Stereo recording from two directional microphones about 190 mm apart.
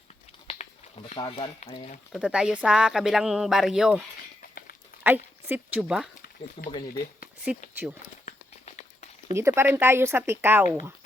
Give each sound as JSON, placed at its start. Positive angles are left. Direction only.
{"t": 0.6, "sound": "a sound", "side_deg": 40}
{"t": 1.1, "sound": "speech", "side_deg": 30}
{"t": 2.1, "sound": "speech", "side_deg": -5}
{"t": 5.0, "sound": "a woman's voice", "side_deg": -10}
{"t": 6.6, "sound": "speech", "side_deg": 30}
{"t": 6.9, "sound": "speech", "side_deg": 50}
{"t": 8.2, "sound": "a sound", "side_deg": 40}
{"t": 9.3, "sound": "speech", "side_deg": -15}